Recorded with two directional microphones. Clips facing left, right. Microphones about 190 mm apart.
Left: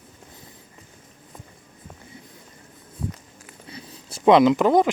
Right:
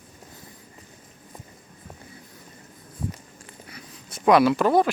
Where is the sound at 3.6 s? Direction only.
30° left (ahead or behind).